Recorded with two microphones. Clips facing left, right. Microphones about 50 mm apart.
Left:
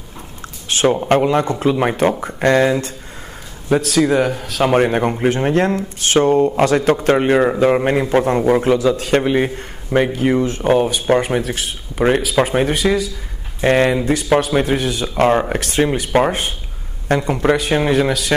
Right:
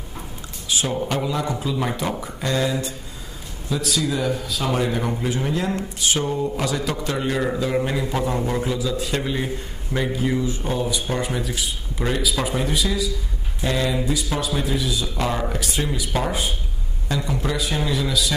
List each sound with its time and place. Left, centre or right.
0.7 s a man's voice: left